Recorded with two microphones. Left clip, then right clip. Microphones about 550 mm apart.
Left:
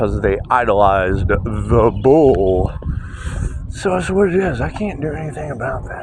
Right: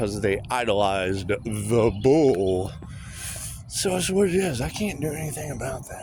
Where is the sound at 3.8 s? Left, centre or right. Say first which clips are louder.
Left 7 dB; right.